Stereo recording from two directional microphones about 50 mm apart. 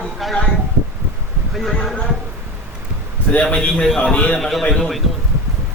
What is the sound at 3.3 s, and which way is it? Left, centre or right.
Speech, left.